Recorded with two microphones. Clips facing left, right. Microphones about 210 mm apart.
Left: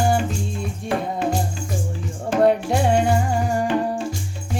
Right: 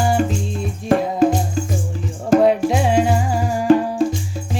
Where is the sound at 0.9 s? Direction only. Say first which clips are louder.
Right 7 dB; 45° right (ahead or behind).